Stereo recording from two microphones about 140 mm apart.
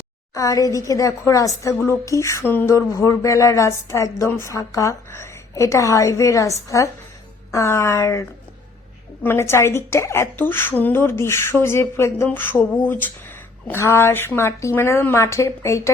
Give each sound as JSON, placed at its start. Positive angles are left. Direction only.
{"t": 0.3, "sound": "a woman's voice", "side_deg": 25}